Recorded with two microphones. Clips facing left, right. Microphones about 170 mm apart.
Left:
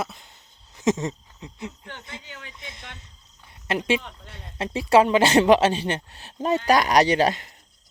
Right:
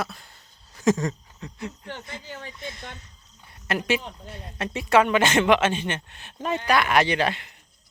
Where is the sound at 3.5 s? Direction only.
25° left (ahead or behind).